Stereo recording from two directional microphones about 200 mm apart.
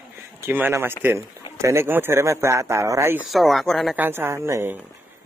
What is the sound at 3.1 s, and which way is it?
Speech, centre (ahead or behind).